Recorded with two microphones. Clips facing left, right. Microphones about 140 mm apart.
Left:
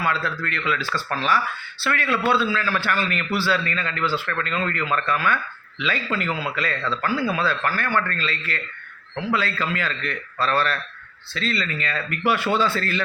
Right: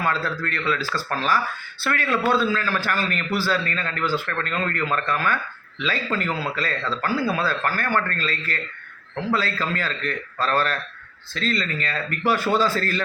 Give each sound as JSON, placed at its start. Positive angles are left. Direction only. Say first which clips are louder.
{"t": 0.0, "sound": "a man's voice", "louder": "even", "side_deg": -40}